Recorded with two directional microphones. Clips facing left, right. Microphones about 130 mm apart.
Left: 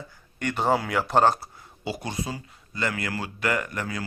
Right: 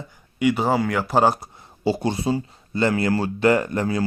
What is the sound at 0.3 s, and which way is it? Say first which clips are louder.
Speech: right 4 dB; 5° right (ahead or behind).